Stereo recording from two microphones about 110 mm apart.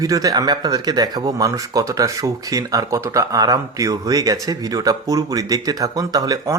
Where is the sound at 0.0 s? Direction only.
35° right (ahead or behind).